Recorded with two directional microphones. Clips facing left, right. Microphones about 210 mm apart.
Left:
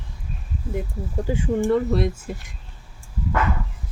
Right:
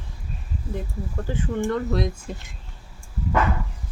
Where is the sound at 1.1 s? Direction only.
15° left (ahead or behind).